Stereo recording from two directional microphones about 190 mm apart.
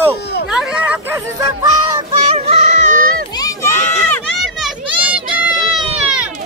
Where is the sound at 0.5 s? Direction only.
5° right (ahead or behind).